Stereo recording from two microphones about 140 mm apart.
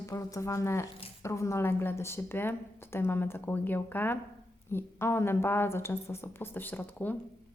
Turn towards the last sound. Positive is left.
turn(degrees=15)  # may be behind; listen again after turning